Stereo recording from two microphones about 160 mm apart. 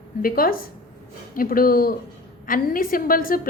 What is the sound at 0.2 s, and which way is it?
A woman's voice, 65° left (ahead or behind).